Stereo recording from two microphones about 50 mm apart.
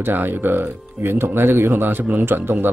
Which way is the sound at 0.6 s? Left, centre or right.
Right.